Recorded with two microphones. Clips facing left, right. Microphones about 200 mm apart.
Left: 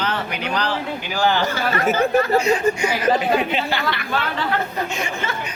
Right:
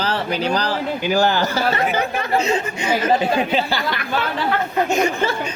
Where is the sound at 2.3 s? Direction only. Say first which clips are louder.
Left 2 dB; 25° right (ahead or behind); by 5.3 s 40° right (ahead or behind).